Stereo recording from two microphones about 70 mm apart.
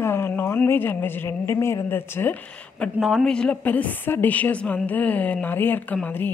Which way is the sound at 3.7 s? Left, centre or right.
Left.